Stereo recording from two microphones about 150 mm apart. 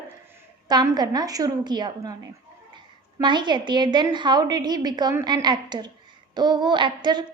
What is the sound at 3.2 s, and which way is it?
A woman's voice, 30° right (ahead or behind).